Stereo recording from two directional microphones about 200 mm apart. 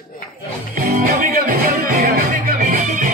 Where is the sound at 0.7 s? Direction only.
45° right (ahead or behind).